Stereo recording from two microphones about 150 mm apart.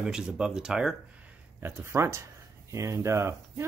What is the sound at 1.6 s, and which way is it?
Speech, 15° right (ahead or behind).